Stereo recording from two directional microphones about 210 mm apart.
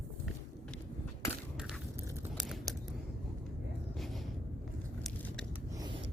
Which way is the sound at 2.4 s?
Centre (ahead or behind).